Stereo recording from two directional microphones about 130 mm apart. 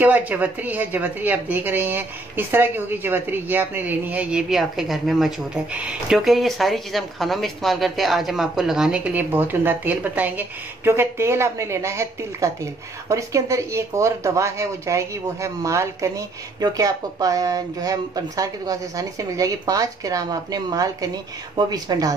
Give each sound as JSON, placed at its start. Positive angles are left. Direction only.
{"t": 0.0, "sound": "a woman's voice", "side_deg": -10}